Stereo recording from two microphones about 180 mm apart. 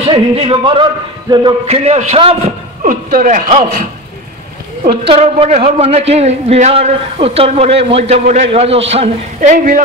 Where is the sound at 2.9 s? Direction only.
50° right (ahead or behind).